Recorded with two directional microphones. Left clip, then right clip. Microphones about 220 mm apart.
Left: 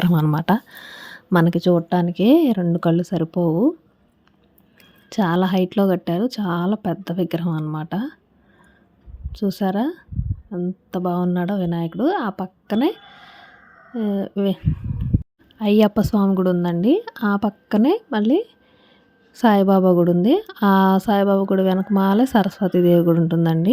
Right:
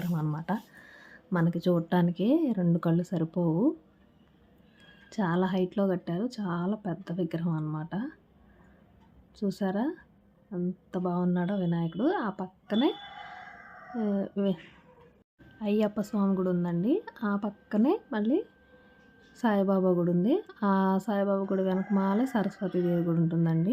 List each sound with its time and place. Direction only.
0.0 s a woman's voice: 40° left (ahead or behind)
2.6 s speech: 30° left (ahead or behind)
5.0 s a woman's voice: 35° left (ahead or behind)
9.3 s a woman's voice: 35° left (ahead or behind)